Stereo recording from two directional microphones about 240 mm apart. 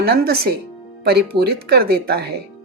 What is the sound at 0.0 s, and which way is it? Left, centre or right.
Speech, right.